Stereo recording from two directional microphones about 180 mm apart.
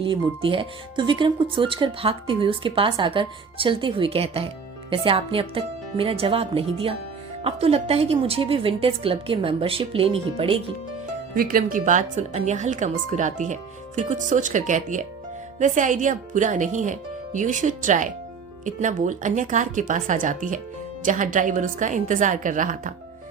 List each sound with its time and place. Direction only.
0.0 s a woman's voice: 30° right (ahead or behind)
11.3 s speech: 55° right (ahead or behind)